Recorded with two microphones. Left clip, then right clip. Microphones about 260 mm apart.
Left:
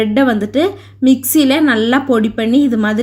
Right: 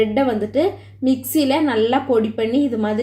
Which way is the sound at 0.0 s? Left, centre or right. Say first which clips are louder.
Left 4 dB; left.